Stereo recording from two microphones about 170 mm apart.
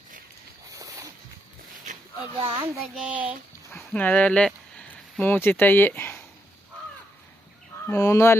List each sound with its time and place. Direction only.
0.7 s a sound: 20° right (ahead or behind)
2.4 s a child's voice: 30° right (ahead or behind)
2.9 s speech: 5° right (ahead or behind)
3.8 s speech: 10° left (ahead or behind)
7.9 s speech: 20° left (ahead or behind)